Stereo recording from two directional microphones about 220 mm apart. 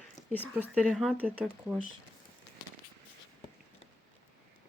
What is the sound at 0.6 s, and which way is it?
Speech, 5° right (ahead or behind).